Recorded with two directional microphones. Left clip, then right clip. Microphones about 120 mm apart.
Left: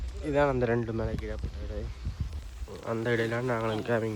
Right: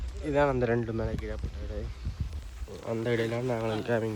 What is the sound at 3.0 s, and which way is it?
Speech, 50° left (ahead or behind).